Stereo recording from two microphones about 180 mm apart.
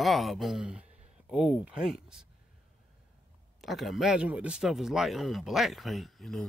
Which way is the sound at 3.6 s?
Centre (ahead or behind).